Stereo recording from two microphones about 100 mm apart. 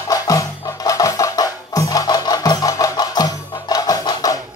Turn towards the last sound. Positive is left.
turn(degrees=35)  # may be behind; listen again after turning